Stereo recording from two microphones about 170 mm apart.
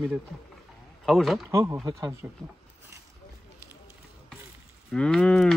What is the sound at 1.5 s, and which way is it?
Speech, 15° right (ahead or behind).